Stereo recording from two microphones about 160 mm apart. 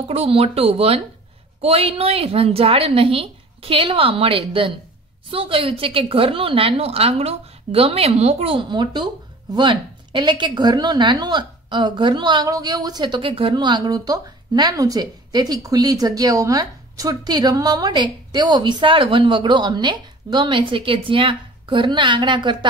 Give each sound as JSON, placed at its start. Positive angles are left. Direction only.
{"t": 0.1, "sound": "a woman's voice", "side_deg": -40}